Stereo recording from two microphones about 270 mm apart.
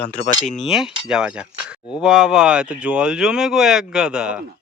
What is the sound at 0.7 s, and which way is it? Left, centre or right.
Speech, centre.